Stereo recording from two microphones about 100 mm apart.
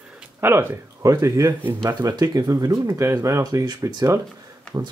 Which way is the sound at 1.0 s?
35° right (ahead or behind).